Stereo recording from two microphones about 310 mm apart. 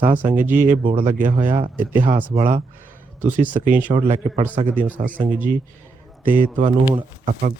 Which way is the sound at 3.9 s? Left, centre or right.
Right.